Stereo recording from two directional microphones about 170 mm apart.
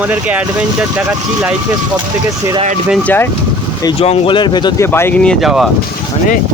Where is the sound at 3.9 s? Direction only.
35° left (ahead or behind).